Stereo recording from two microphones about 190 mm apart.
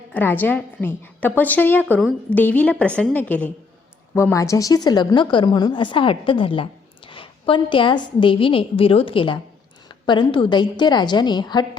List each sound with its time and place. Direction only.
0.1 s a woman's voice: 10° left (ahead or behind)